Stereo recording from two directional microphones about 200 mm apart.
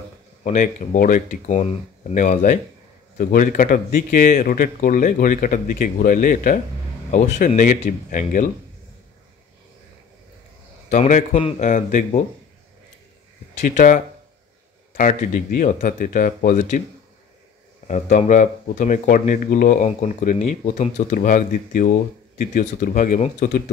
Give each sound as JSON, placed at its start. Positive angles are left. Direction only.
{"t": 0.4, "sound": "speech", "side_deg": 40}
{"t": 10.9, "sound": "speech", "side_deg": 35}
{"t": 13.6, "sound": "speech", "side_deg": 40}
{"t": 17.8, "sound": "speech", "side_deg": 35}